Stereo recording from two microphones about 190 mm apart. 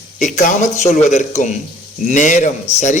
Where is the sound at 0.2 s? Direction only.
40° left (ahead or behind).